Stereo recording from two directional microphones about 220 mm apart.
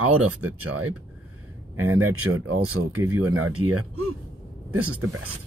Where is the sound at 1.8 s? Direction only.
75° right (ahead or behind).